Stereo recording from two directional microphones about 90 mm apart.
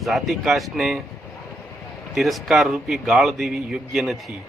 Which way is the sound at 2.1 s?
Centre (ahead or behind).